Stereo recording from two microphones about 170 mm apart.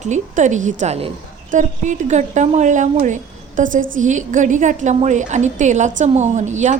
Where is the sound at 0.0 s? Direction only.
45° right (ahead or behind).